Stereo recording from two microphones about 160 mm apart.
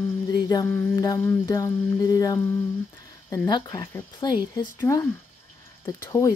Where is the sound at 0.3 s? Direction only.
25° left (ahead or behind).